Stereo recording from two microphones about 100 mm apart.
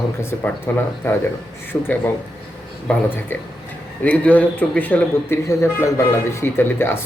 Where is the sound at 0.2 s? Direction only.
25° left (ahead or behind).